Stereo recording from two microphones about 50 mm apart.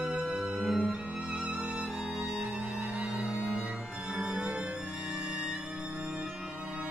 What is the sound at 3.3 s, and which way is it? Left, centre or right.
Music, centre.